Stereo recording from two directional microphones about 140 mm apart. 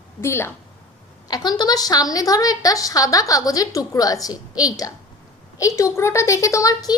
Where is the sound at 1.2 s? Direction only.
30° left (ahead or behind).